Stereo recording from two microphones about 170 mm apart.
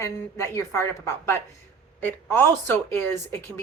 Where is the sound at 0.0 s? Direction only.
15° left (ahead or behind).